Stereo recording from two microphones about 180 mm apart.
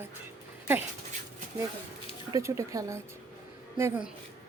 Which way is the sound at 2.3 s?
15° right (ahead or behind).